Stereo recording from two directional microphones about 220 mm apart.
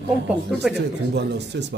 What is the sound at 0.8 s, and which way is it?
Speech, 50° right (ahead or behind).